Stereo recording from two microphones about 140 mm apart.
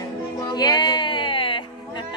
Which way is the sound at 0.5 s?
30° left (ahead or behind).